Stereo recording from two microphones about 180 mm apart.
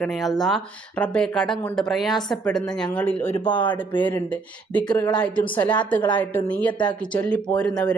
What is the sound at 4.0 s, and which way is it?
Speech, 10° left (ahead or behind).